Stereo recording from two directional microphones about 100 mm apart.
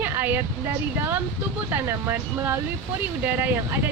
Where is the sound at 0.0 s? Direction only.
20° right (ahead or behind).